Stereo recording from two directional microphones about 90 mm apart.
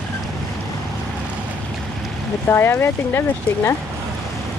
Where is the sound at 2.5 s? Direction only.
25° left (ahead or behind).